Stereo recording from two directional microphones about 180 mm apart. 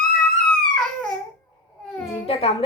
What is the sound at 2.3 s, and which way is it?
Speech, 35° left (ahead or behind).